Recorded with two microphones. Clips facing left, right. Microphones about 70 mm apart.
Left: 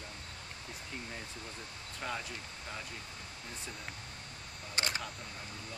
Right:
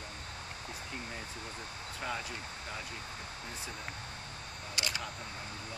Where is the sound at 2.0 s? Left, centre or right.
Centre.